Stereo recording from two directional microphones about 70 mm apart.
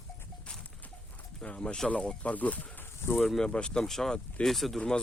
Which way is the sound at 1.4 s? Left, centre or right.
Centre.